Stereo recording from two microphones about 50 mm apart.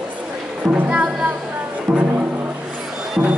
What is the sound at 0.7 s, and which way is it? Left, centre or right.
Speech, right.